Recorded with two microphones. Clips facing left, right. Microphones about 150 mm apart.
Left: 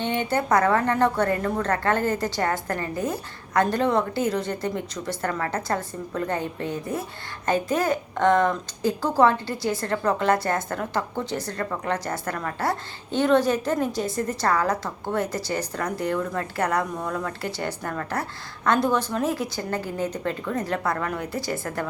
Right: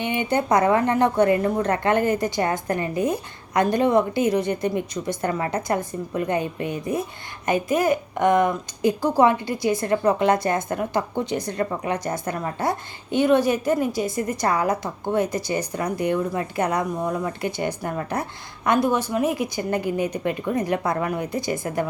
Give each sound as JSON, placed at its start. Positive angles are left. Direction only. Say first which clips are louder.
{"t": 0.0, "sound": "a woman's voice", "louder": "right 2 dB", "side_deg": -15}